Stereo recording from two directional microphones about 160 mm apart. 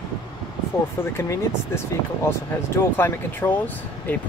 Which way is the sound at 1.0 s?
15° left (ahead or behind).